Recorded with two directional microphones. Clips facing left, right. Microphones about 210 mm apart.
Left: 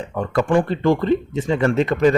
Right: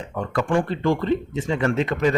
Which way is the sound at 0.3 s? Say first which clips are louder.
Left 4 dB; 35° left (ahead or behind).